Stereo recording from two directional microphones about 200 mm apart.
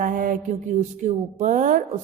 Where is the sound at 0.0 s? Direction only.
40° right (ahead or behind).